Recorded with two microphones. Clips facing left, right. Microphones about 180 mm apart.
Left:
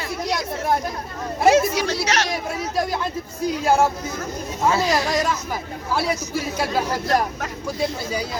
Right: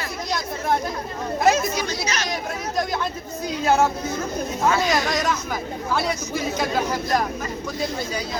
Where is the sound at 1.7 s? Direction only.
90° left.